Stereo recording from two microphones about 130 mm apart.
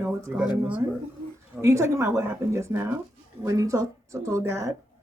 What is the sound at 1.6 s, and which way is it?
A woman's voice, 20° right (ahead or behind).